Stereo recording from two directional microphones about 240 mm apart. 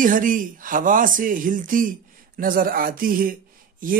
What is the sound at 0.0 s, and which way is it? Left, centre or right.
Speech, right.